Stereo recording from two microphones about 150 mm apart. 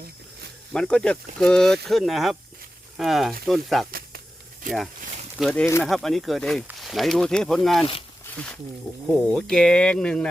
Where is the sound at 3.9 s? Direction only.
80° right.